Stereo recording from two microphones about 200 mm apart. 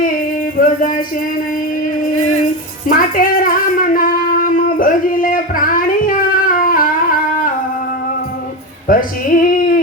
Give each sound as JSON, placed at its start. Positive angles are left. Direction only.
{"t": 0.8, "sound": "speech", "side_deg": 40}
{"t": 2.8, "sound": "shofar", "side_deg": 45}
{"t": 8.9, "sound": "music", "side_deg": 45}